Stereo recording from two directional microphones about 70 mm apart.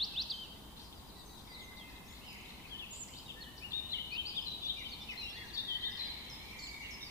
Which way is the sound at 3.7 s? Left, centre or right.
Left.